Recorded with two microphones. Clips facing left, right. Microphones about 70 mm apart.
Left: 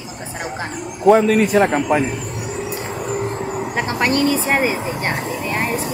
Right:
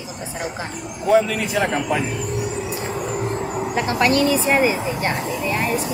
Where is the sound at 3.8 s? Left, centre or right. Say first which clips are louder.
Right 1 dB; left.